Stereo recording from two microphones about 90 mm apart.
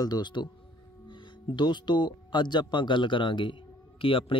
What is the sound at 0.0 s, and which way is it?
Speech, 50° left (ahead or behind).